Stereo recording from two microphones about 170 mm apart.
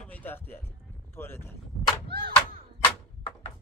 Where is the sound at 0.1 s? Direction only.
10° left (ahead or behind).